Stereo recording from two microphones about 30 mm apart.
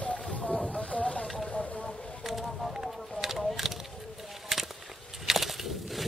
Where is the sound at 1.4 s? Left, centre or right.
Left.